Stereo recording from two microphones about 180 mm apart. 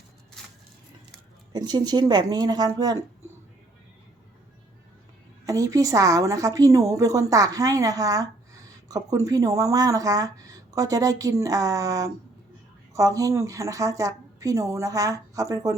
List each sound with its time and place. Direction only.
0.4 s a sound: 5° left (ahead or behind)
1.5 s speech: 25° right (ahead or behind)
5.5 s a woman's voice: 20° right (ahead or behind)